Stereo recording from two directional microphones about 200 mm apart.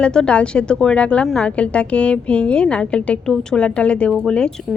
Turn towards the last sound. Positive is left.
turn(degrees=5)  # may be behind; listen again after turning